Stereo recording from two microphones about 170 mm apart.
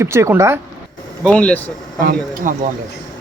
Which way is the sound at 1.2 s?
5° left (ahead or behind).